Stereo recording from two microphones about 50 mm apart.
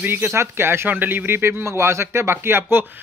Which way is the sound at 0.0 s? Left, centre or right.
Right.